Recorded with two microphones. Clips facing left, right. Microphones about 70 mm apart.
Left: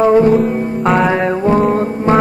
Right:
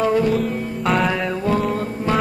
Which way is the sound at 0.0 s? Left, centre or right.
Left.